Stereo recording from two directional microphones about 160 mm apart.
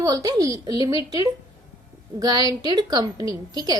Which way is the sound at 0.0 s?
20° right (ahead or behind).